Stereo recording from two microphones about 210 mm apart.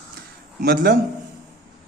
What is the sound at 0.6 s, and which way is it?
Speech, 40° right (ahead or behind).